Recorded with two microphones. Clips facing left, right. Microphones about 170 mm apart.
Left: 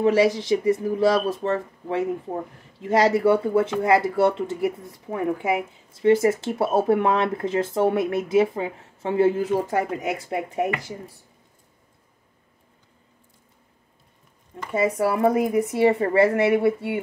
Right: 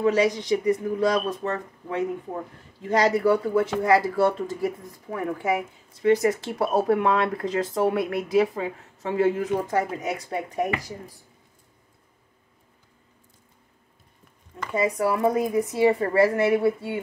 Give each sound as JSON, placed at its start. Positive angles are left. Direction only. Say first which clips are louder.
{"t": 0.0, "sound": "speech", "louder": "left 3 dB", "side_deg": 30}
{"t": 14.7, "sound": "speech", "louder": "left 2 dB", "side_deg": 30}